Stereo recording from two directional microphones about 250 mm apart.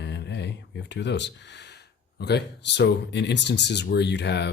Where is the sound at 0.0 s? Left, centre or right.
Left.